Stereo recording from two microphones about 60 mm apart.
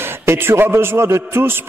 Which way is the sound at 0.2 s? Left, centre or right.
Right.